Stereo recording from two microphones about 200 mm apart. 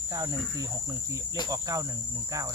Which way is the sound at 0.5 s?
15° right (ahead or behind).